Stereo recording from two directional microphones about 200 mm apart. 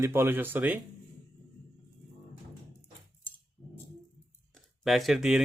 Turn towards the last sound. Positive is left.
turn(degrees=0)  # may be behind; listen again after turning